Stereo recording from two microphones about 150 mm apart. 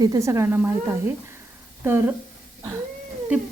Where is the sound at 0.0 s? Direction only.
20° right (ahead or behind).